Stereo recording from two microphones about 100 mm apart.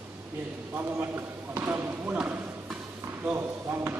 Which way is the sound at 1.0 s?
25° right (ahead or behind).